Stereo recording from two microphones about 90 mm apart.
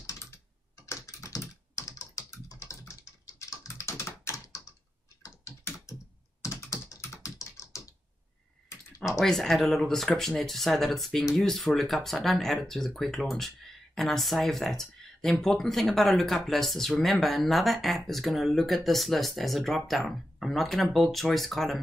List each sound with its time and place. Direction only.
0.0 s typing: 35° left (ahead or behind)
0.8 s computer keyboard: 35° left (ahead or behind)
3.3 s typing: 35° left (ahead or behind)
6.4 s computer keyboard: 35° left (ahead or behind)
9.2 s speech: 5° left (ahead or behind)